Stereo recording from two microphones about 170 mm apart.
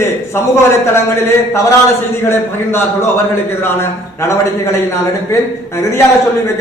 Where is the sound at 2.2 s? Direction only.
15° left (ahead or behind).